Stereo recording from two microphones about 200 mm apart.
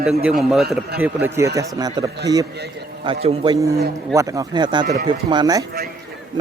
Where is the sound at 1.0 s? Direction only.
10° right (ahead or behind).